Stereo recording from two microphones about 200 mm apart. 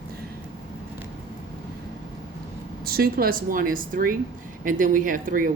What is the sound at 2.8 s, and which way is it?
A woman's voice, 50° right (ahead or behind).